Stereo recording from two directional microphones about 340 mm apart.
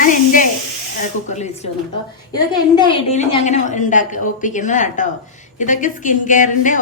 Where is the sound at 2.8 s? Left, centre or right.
Centre.